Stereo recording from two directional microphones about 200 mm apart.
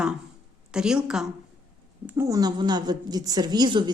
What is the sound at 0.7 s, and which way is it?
A woman's voice, 5° right (ahead or behind).